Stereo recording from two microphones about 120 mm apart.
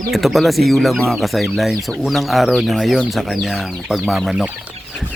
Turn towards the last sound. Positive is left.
turn(degrees=-5)  # may be behind; listen again after turning